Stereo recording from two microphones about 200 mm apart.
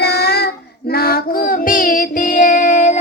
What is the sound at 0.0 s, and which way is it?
Child singing, 55° left (ahead or behind).